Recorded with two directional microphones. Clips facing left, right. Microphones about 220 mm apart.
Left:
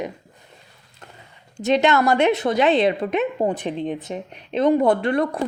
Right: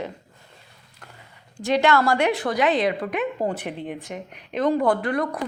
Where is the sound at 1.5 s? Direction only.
20° left (ahead or behind).